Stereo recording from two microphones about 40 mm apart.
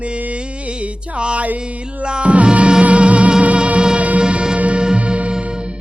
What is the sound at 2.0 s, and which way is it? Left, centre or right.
Music, right.